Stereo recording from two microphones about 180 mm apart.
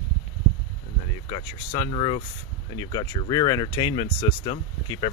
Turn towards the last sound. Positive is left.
turn(degrees=25)  # may be behind; listen again after turning